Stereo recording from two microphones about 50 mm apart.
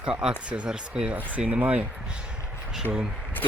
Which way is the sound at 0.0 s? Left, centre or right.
Centre.